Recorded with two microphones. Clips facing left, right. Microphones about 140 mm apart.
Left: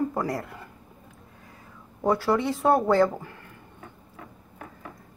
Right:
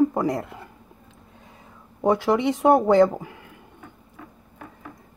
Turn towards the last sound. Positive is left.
turn(degrees=-15)  # may be behind; listen again after turning